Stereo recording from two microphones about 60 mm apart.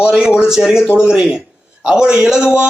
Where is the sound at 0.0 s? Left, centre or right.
Centre.